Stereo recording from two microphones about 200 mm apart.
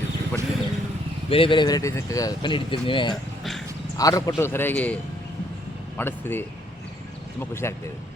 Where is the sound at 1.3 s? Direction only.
25° left (ahead or behind).